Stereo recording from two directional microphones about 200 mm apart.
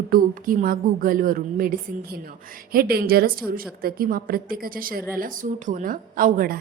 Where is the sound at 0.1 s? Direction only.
45° right (ahead or behind).